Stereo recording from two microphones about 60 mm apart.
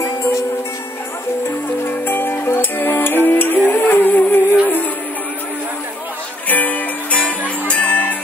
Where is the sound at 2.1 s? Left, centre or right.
Left.